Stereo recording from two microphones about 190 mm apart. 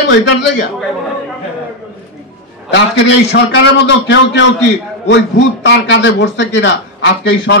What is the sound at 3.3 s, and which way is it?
A man's voice, 65° left (ahead or behind).